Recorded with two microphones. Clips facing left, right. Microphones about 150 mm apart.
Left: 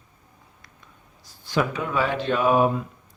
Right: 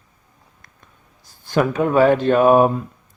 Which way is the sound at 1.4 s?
50° right (ahead or behind).